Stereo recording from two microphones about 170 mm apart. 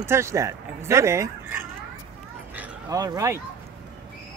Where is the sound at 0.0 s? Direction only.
15° right (ahead or behind).